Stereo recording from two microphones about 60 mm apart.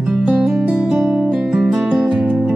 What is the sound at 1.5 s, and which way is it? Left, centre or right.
Guitar, centre.